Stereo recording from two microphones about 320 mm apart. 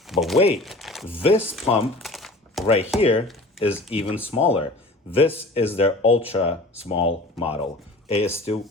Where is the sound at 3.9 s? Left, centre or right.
Centre.